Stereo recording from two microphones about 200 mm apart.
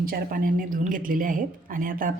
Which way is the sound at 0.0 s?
45° right (ahead or behind).